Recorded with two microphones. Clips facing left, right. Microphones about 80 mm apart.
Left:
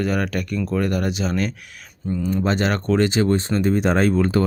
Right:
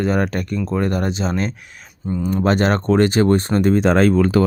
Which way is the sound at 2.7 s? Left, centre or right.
Right.